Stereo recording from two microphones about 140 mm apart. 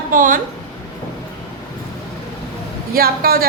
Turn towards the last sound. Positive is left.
turn(degrees=-90)